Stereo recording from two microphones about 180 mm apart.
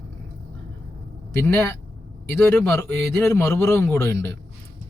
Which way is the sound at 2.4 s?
10° left (ahead or behind).